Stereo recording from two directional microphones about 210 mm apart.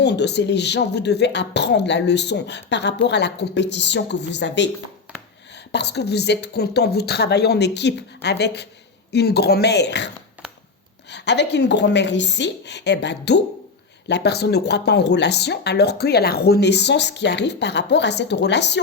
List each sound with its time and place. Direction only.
0.0 s speech: 55° left (ahead or behind)
5.7 s speech: 50° left (ahead or behind)
11.1 s speech: 55° left (ahead or behind)